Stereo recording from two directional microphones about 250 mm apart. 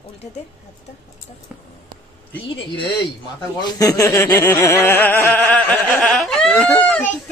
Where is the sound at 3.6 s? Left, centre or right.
Centre.